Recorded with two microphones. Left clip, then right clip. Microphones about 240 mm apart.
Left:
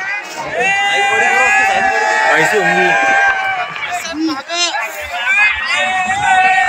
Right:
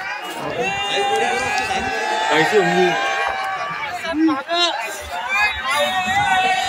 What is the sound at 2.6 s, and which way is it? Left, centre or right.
Speech, centre.